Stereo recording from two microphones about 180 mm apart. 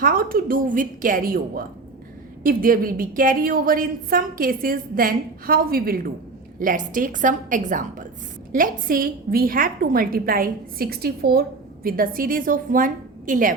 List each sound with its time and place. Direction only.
0.0 s a woman's voice: 50° right (ahead or behind)